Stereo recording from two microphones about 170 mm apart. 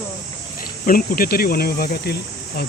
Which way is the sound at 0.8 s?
55° left (ahead or behind).